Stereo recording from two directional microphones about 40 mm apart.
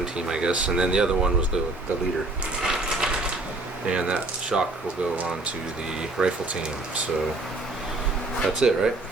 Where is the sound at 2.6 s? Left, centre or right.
Centre.